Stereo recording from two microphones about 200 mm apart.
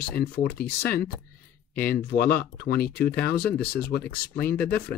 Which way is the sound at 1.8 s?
50° left (ahead or behind).